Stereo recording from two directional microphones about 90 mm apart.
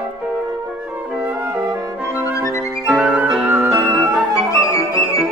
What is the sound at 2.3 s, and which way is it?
Music, 35° left (ahead or behind).